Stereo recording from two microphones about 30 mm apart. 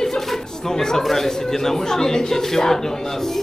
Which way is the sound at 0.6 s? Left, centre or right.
Centre.